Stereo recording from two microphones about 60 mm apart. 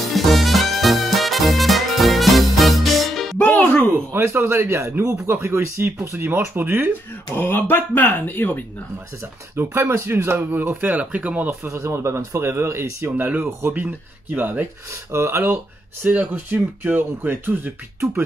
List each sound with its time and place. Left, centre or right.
0.1 s music: centre
3.4 s music: left
4.1 s speech: right
7.3 s speech: left
9.2 s speech: right
10.5 s speech: right
11.6 s speech: right
13.0 s speech: right
14.9 s speech: right